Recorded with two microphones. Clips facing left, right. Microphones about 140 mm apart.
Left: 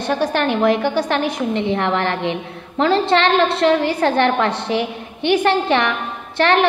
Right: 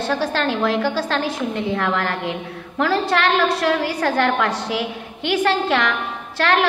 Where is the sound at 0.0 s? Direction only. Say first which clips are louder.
Left 2 dB; 20° left (ahead or behind).